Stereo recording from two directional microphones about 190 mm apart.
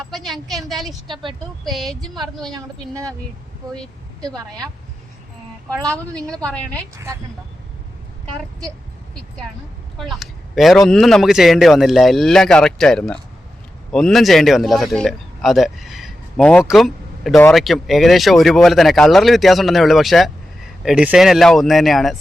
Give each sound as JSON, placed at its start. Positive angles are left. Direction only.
{"t": 0.1, "sound": "speech", "side_deg": 0}
{"t": 1.0, "sound": "speech", "side_deg": -25}
{"t": 1.6, "sound": "speech", "side_deg": 0}
{"t": 2.5, "sound": "speech", "side_deg": -20}
{"t": 5.6, "sound": "a woman's voice", "side_deg": 5}
{"t": 6.9, "sound": "speech", "side_deg": -15}
{"t": 10.0, "sound": "a man's voice", "side_deg": 0}